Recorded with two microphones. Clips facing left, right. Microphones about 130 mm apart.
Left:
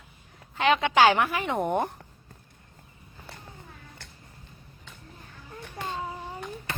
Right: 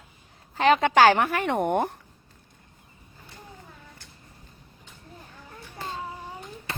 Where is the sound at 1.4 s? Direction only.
60° right (ahead or behind).